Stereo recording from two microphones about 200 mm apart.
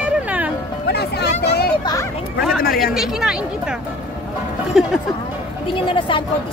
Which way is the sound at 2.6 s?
50° left (ahead or behind).